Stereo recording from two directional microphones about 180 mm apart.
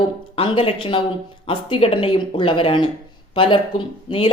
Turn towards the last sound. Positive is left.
turn(degrees=30)  # may be behind; listen again after turning